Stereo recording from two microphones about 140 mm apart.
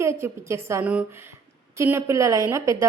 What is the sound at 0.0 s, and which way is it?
A woman's voice, 20° right (ahead or behind).